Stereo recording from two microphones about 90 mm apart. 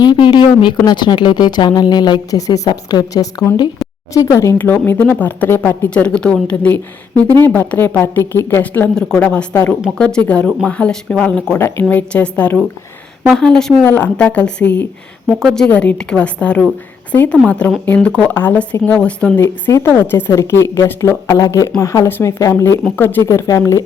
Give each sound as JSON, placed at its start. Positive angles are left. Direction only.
{"t": 0.0, "sound": "speech", "side_deg": 55}
{"t": 4.5, "sound": "a woman's voice", "side_deg": 20}
{"t": 11.5, "sound": "a woman's voice", "side_deg": 25}
{"t": 13.8, "sound": "a woman's voice", "side_deg": 20}
{"t": 19.7, "sound": "a woman's voice", "side_deg": 35}
{"t": 20.3, "sound": "speech", "side_deg": 35}
{"t": 21.2, "sound": "a woman's voice", "side_deg": 45}
{"t": 23.2, "sound": "speech", "side_deg": 35}